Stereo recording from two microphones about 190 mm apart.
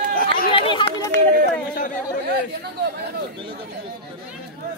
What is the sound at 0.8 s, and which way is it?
Run, 60° right (ahead or behind).